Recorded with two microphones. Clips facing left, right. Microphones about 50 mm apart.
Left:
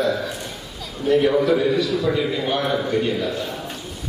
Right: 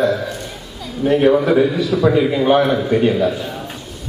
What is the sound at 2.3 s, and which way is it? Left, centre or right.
A man's voice, right.